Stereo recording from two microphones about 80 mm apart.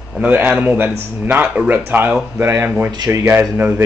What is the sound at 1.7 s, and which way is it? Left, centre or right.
A man's voice, right.